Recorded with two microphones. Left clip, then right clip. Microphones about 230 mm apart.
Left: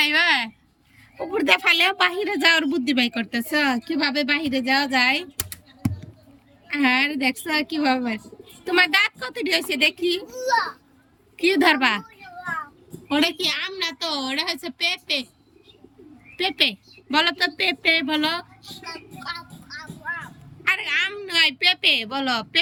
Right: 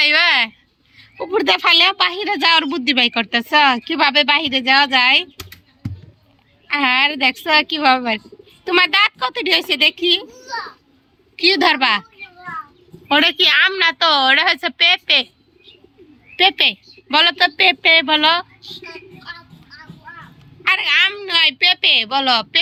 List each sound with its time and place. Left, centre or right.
0.0 s a sound: centre
0.9 s a man's voice: centre
6.7 s a man's voice: centre
11.3 s a man's voice: centre
13.1 s a woman's voice: centre
16.4 s a man's voice: centre
19.6 s a sound: left
20.7 s a man's voice: centre